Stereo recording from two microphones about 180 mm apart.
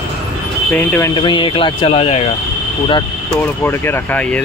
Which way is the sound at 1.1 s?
25° left (ahead or behind).